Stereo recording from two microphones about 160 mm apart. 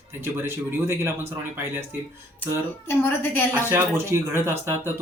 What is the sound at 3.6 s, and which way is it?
Speech, 15° right (ahead or behind).